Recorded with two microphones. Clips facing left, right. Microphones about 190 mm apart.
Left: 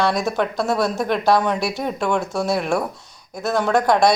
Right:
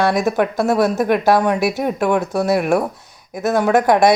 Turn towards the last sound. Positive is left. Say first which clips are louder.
# right 3 dB
turn(degrees=-15)  # may be behind; listen again after turning